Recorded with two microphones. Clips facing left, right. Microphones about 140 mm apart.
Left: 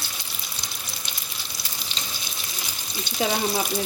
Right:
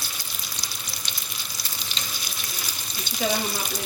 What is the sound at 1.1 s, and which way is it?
Frying, 5° left (ahead or behind).